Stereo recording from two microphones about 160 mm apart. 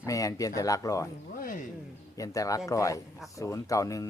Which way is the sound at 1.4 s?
60° left (ahead or behind).